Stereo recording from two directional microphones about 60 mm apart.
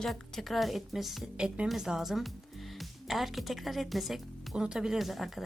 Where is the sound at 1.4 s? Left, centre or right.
Centre.